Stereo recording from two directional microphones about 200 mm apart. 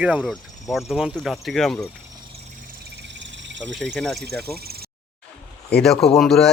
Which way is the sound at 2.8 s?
60° right (ahead or behind).